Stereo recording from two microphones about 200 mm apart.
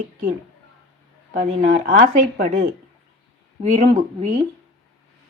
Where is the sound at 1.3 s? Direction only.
40° right (ahead or behind).